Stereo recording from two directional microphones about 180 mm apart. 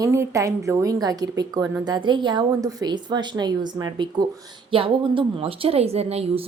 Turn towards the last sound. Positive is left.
turn(degrees=-35)  # may be behind; listen again after turning